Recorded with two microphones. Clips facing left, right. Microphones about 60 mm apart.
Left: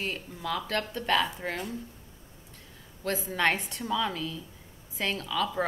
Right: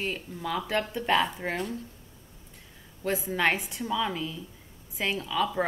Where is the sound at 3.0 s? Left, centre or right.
Centre.